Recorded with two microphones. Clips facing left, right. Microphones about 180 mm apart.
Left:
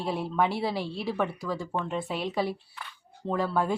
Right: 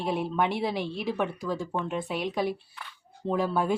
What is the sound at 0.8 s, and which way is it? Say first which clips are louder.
Speech: right 1 dB; 20° right (ahead or behind).